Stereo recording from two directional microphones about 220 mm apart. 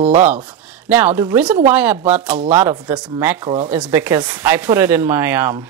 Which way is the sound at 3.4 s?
30° right (ahead or behind).